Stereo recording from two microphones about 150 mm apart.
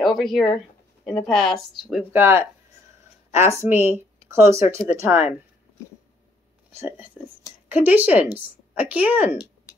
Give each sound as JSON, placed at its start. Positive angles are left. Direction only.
{"t": 0.1, "sound": "speech", "side_deg": 0}
{"t": 7.6, "sound": "speech", "side_deg": -10}